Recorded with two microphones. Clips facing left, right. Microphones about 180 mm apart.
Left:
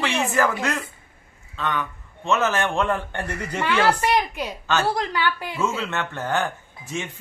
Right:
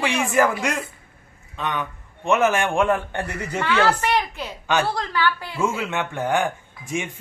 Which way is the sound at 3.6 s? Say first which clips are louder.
Even; 10° left (ahead or behind).